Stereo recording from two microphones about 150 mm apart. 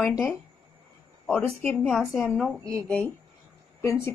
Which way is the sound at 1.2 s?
10° left (ahead or behind).